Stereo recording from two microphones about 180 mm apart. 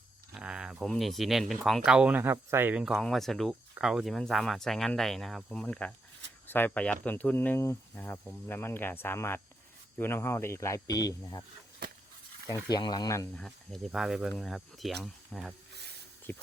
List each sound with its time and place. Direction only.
0.3 s speech: 5° right (ahead or behind); by 11.4 s 20° left (ahead or behind)
12.5 s speech: 20° left (ahead or behind)
13.3 s speech: 5° left (ahead or behind)